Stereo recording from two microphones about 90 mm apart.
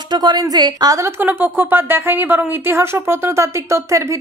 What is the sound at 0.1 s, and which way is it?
Speech, 50° right (ahead or behind).